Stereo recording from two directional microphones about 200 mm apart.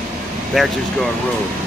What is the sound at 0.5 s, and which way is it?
Speech, centre (ahead or behind).